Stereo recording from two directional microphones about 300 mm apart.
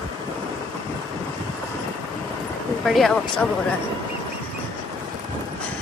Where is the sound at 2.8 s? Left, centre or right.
Centre.